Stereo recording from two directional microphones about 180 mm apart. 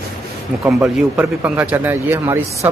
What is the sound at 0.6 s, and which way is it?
A man's voice, centre (ahead or behind).